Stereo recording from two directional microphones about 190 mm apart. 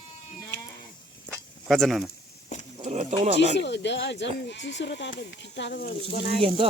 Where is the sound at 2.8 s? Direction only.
35° right (ahead or behind).